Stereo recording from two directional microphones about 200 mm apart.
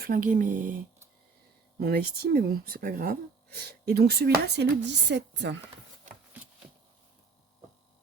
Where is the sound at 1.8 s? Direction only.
50° right (ahead or behind).